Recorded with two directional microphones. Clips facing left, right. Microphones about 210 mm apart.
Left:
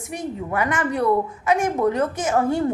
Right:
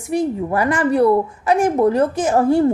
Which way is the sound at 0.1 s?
35° right (ahead or behind).